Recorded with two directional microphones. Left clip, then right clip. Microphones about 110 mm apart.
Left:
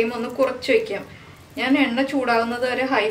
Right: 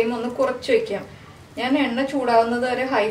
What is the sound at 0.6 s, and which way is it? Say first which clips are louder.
A woman's voice: even; 15° left (ahead or behind).